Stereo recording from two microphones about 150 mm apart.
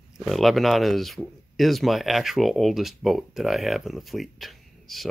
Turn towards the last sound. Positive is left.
turn(degrees=0)  # may be behind; listen again after turning